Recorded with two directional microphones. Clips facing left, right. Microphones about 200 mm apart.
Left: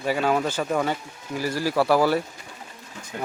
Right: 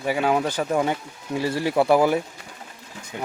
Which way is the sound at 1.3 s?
25° right (ahead or behind).